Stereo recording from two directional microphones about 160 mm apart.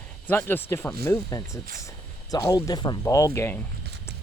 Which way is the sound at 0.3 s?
15° left (ahead or behind).